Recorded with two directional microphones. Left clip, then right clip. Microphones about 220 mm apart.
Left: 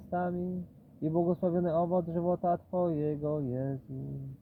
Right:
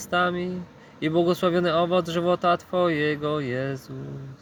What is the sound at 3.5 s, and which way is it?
Speech, 25° right (ahead or behind).